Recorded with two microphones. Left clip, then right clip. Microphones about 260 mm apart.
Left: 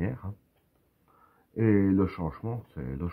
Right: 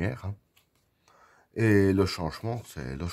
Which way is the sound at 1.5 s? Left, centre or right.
Right.